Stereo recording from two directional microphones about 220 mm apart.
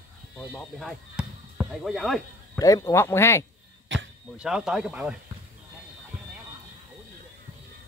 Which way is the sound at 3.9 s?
5° right (ahead or behind).